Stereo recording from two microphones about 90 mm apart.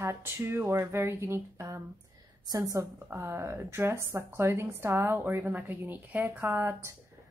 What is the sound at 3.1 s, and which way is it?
A woman's voice, 25° right (ahead or behind).